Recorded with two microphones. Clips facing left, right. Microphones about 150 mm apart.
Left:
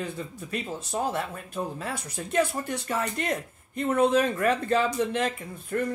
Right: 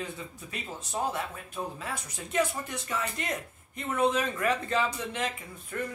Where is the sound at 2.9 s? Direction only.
45° left (ahead or behind).